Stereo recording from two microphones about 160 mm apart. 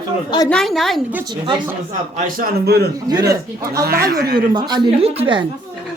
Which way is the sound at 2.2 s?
65° right (ahead or behind).